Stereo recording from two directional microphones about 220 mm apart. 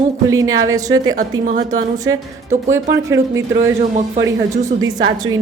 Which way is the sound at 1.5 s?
35° right (ahead or behind).